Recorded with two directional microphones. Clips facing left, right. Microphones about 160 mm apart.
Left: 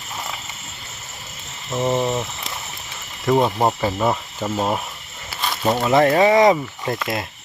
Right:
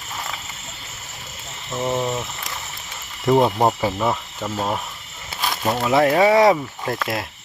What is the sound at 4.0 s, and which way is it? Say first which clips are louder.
Speech: left 2 dB; 5° left (ahead or behind).